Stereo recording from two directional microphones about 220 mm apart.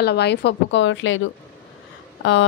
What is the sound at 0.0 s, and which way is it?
Speech, 50° left (ahead or behind).